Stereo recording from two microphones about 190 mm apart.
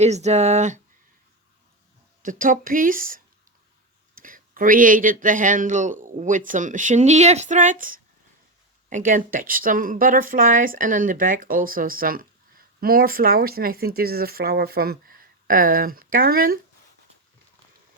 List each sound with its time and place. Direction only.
0.0 s speech: 35° right (ahead or behind)
2.2 s speech: 45° right (ahead or behind)